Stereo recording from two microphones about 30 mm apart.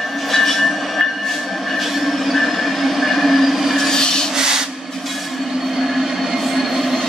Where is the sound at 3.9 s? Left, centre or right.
Left.